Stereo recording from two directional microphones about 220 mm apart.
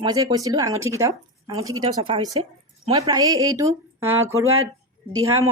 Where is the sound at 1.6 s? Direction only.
70° right (ahead or behind).